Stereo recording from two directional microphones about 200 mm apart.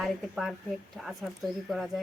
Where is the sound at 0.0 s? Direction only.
Centre (ahead or behind).